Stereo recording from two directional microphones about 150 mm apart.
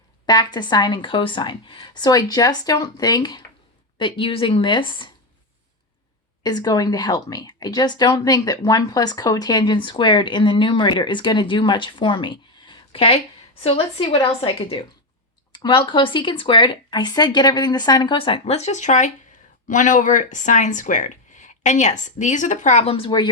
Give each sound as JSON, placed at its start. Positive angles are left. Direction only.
{"t": 0.3, "sound": "a woman's voice", "side_deg": 30}
{"t": 6.4, "sound": "speech", "side_deg": 25}